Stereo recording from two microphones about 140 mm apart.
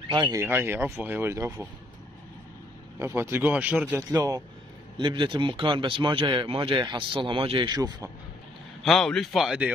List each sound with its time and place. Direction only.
0.1 s speech: 30° right (ahead or behind)
0.4 s speech: 15° right (ahead or behind)
3.0 s speech: 20° right (ahead or behind)
4.1 s a man's voice: 25° right (ahead or behind)
7.7 s a man's voice: 30° right (ahead or behind)
8.8 s speech: centre (ahead or behind)